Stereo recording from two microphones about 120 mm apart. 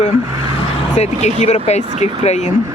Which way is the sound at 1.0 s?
60° left (ahead or behind).